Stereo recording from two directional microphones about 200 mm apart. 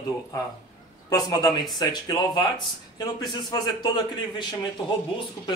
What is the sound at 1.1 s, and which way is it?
Speech, 20° left (ahead or behind).